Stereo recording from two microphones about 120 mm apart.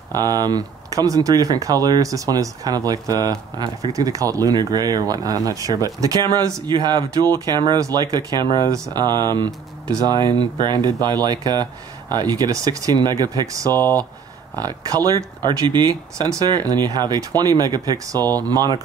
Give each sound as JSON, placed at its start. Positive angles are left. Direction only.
{"t": 0.1, "sound": "speech", "side_deg": -35}